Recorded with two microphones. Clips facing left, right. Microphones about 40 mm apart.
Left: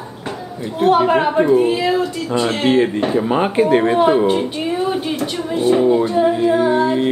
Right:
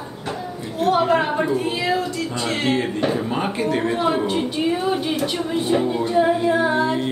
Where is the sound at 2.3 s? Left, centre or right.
Left.